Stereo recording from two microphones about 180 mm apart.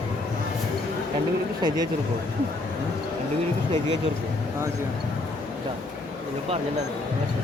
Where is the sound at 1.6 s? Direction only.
20° right (ahead or behind).